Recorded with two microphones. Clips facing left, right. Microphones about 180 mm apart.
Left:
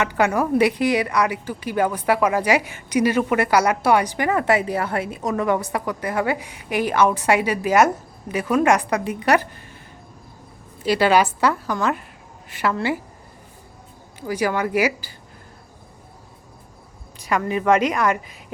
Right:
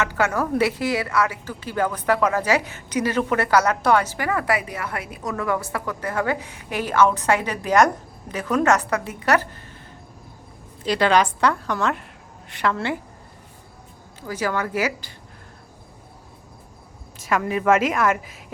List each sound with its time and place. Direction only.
0.0 s a woman's voice: 15° left (ahead or behind)
10.8 s a woman's voice: 10° left (ahead or behind)
14.2 s a woman's voice: 15° left (ahead or behind)
17.2 s a woman's voice: centre (ahead or behind)